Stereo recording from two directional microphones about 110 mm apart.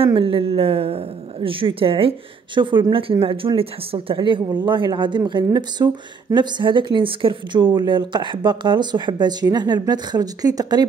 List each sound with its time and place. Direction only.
0.0 s a woman's voice: 55° right (ahead or behind); by 10.9 s 35° right (ahead or behind)